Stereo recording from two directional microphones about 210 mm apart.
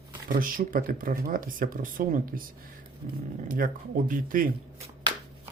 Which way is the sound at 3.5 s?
40° right (ahead or behind).